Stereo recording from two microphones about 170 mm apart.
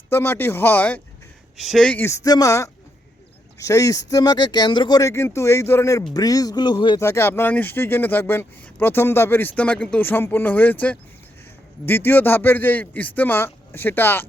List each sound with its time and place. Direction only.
0.1 s speech: 15° left (ahead or behind)
7.0 s speech: 15° left (ahead or behind)